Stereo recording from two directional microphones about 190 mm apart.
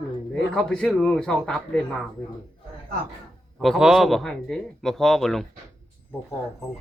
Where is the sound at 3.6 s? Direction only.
Centre (ahead or behind).